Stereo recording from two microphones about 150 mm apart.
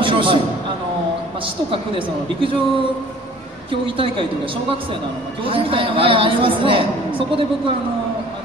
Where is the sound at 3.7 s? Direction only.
35° right (ahead or behind).